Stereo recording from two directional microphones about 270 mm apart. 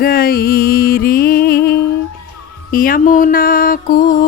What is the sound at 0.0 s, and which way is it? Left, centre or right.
Music, left.